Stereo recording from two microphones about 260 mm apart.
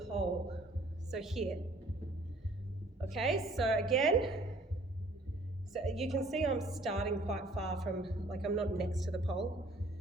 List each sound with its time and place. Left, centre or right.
1.1 s a woman's voice: centre
3.1 s a woman's voice: centre
5.7 s a woman's voice: centre